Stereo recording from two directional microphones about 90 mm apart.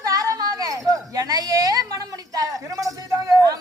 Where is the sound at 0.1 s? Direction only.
40° right (ahead or behind).